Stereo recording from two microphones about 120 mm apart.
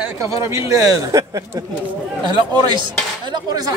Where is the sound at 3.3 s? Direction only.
30° right (ahead or behind).